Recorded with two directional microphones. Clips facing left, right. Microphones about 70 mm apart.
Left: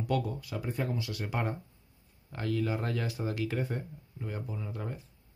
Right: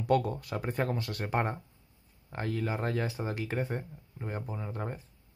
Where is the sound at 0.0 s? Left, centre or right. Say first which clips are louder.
Right 4 dB; right.